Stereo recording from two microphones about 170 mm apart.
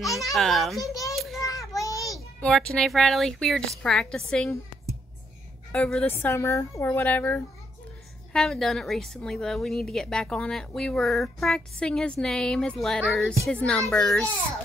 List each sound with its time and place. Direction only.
0.0 s a child's voice: 20° left (ahead or behind)
0.3 s a woman's voice: centre (ahead or behind)
1.1 s children playing: centre (ahead or behind)
1.4 s child singing: 20° left (ahead or behind)
2.4 s a woman's voice: 5° left (ahead or behind)
5.7 s a woman's voice: 5° left (ahead or behind)
6.1 s a woman's voice: 15° left (ahead or behind)